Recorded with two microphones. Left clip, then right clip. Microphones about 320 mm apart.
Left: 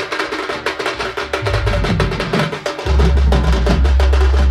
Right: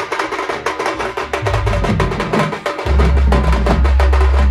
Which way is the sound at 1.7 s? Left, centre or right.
Right.